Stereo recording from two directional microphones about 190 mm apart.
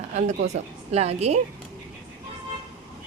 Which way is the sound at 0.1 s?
40° right (ahead or behind).